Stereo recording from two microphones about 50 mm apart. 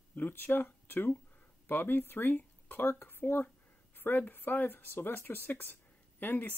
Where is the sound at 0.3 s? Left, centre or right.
Left.